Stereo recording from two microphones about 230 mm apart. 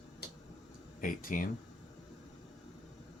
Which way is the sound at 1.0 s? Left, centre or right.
Left.